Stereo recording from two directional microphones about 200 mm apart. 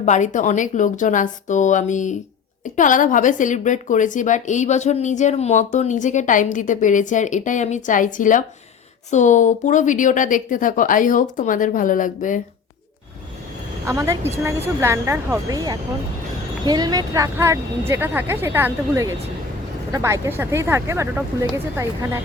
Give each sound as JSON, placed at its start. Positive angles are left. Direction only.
{"t": 0.0, "sound": "a woman's voice", "side_deg": 35}
{"t": 13.8, "sound": "speech", "side_deg": -15}